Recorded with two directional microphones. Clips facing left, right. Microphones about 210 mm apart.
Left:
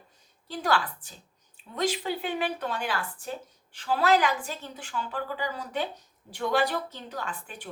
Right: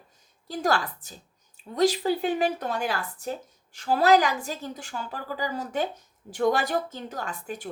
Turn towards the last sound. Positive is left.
turn(degrees=-45)  # may be behind; listen again after turning